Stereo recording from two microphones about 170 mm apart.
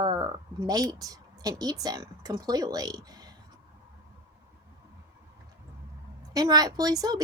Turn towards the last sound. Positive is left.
turn(degrees=-20)  # may be behind; listen again after turning